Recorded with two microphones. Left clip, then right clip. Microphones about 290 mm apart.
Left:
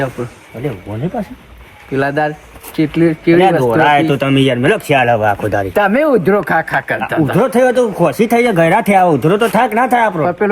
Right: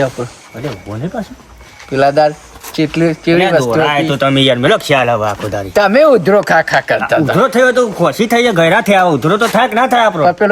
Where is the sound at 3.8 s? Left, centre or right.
Right.